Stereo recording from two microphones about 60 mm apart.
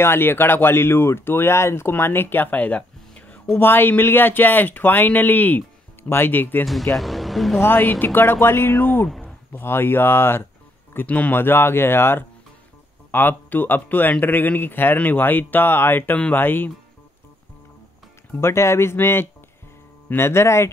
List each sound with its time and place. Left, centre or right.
0.0 s speech: left
3.5 s speech: left
6.6 s speech: centre
7.6 s speech: left
11.1 s speech: left
11.3 s speech: left
18.4 s speech: left